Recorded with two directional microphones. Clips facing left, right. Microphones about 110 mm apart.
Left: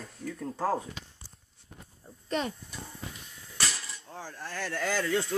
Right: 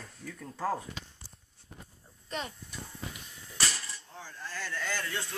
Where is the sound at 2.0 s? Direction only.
20° left (ahead or behind).